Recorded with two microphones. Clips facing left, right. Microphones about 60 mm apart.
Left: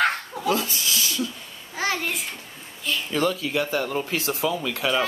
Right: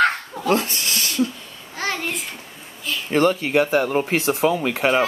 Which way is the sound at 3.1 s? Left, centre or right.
Right.